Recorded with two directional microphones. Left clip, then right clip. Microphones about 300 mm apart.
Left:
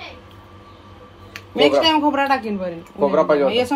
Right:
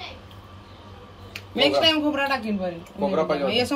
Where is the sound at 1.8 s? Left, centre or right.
Centre.